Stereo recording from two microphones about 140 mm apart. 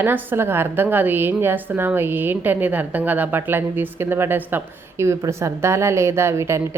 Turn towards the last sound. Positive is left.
turn(degrees=-20)  # may be behind; listen again after turning